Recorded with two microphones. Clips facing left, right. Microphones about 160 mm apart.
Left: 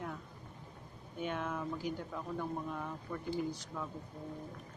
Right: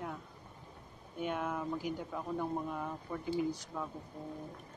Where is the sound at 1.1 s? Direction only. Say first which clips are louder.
Right 2 dB; 5° right (ahead or behind).